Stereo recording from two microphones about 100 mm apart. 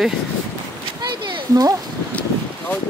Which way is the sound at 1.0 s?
45° right (ahead or behind).